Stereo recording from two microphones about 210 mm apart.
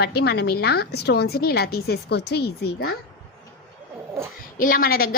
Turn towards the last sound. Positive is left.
turn(degrees=45)  # may be behind; listen again after turning